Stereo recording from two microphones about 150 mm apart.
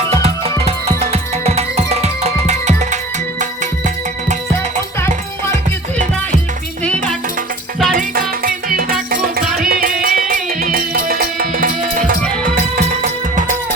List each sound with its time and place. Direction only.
0.1 s music: 40° right (ahead or behind)
7.9 s music: 70° right (ahead or behind)